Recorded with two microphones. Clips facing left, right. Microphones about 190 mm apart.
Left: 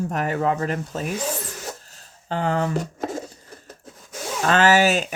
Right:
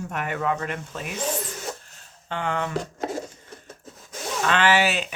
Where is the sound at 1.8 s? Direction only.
35° left (ahead or behind).